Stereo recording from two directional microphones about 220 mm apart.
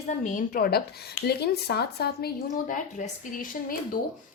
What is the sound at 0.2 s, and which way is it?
A woman's voice, 35° left (ahead or behind).